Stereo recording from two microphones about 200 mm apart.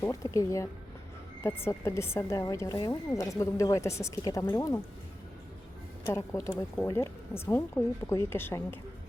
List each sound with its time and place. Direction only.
0.0 s speech: 15° left (ahead or behind)
6.1 s speech: 15° left (ahead or behind)